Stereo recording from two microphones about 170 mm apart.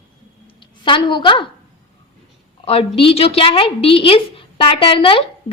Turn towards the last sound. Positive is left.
turn(degrees=30)  # may be behind; listen again after turning